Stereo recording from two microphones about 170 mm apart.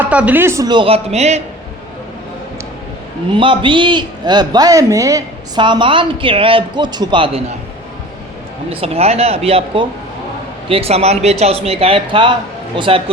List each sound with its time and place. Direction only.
0.0 s a man's voice: 10° right (ahead or behind); by 1.4 s 40° right (ahead or behind)
3.3 s a man's voice: 30° right (ahead or behind)
8.7 s a man's voice: 35° right (ahead or behind)